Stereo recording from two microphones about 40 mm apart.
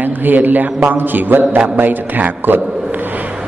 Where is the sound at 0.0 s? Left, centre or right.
Right.